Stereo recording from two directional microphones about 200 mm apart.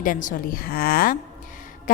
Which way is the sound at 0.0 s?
40° left (ahead or behind).